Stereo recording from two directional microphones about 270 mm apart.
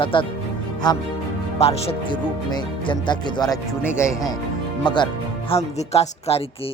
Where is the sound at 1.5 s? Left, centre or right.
Left.